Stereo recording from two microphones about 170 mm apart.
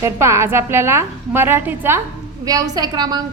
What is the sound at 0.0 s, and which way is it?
A woman's voice, 15° right (ahead or behind).